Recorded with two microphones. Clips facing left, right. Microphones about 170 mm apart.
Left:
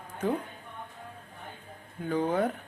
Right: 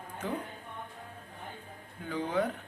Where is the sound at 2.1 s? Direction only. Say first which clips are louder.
Left 4 dB; 50° left (ahead or behind).